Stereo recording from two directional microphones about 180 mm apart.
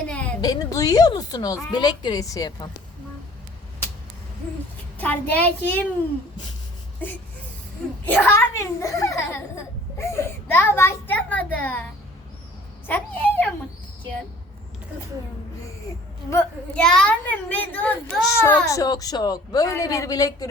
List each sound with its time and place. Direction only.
0.1 s a sound: 5° left (ahead or behind)
0.4 s a woman's voice: 20° left (ahead or behind)
4.9 s a child's voice: 10° left (ahead or behind)
8.0 s a child's voice: 10° left (ahead or behind)
10.0 s a sound: 15° left (ahead or behind)
12.9 s a child's voice: 10° left (ahead or behind)
16.3 s a child's voice: 10° left (ahead or behind)